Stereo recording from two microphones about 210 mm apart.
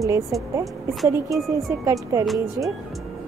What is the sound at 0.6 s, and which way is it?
Speech, centre (ahead or behind).